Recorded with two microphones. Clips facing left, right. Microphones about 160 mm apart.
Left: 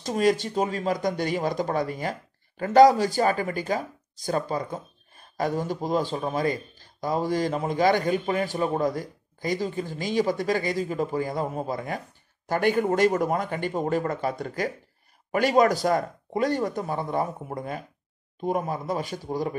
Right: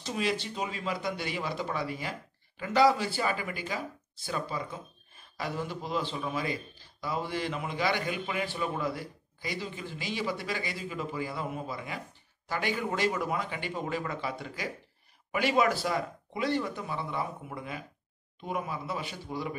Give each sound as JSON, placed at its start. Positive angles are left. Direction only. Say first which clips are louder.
{"t": 0.0, "sound": "a man's voice", "louder": "left 9 dB", "side_deg": 45}